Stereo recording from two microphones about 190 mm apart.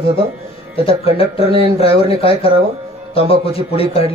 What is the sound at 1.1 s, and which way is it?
A man's voice, 30° left (ahead or behind).